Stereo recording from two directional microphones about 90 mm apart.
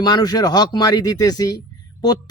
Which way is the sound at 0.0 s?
50° left (ahead or behind).